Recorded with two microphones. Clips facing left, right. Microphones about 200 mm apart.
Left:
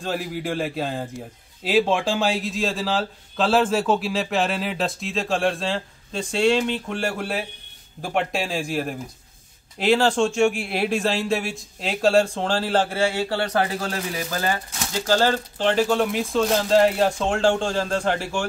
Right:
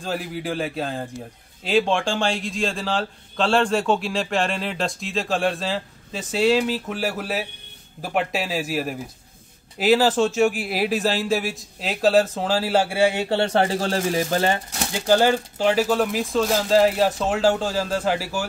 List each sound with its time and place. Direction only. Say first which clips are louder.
0.0 s a man's voice: left 1 dB; centre (ahead or behind); by 14.8 s 30° right (ahead or behind)
14.9 s a man's voice: right 2 dB; 15° right (ahead or behind)